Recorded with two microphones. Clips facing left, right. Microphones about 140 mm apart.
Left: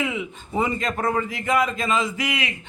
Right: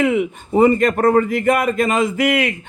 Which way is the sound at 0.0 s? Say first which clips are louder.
Right 10 dB; 60° right (ahead or behind).